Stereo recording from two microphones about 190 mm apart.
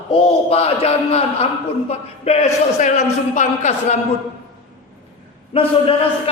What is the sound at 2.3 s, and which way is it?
A man's voice, 35° left (ahead or behind).